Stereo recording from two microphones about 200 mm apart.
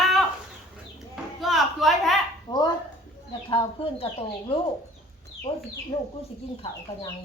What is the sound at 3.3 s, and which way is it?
Chicken, 25° left (ahead or behind).